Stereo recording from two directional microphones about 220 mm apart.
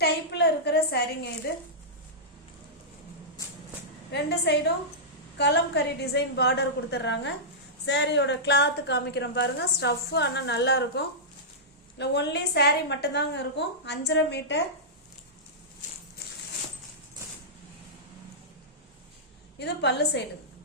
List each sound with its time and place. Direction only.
0.0 s a woman's voice: 50° left (ahead or behind)
4.1 s a woman's voice: 50° left (ahead or behind)
19.5 s a woman's voice: 50° left (ahead or behind)